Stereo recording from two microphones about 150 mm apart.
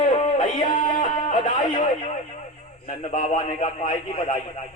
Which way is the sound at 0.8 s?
60° left (ahead or behind).